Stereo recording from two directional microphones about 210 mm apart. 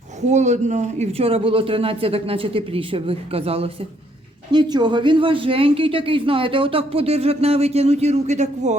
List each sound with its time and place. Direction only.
0.3 s speech: 35° right (ahead or behind)